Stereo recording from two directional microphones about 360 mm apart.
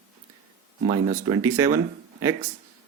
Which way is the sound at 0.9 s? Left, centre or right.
Centre.